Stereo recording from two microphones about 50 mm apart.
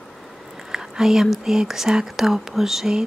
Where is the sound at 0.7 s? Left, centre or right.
Centre.